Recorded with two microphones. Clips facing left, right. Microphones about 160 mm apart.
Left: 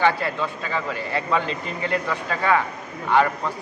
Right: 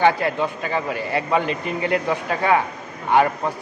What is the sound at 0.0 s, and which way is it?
A man's voice, 15° right (ahead or behind).